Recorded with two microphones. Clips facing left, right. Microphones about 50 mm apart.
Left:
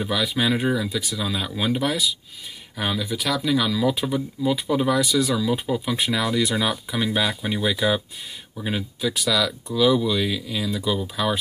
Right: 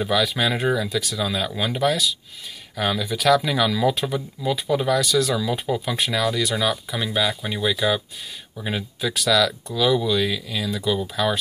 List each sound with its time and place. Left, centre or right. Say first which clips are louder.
0.1 s speech: even; centre
3.0 s speech: right 6 dB; centre
5.3 s speech: even; centre
5.9 s speech: left 1 dB; centre
8.5 s speech: even; centre